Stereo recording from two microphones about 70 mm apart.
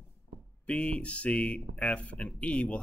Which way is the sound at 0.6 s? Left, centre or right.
Centre.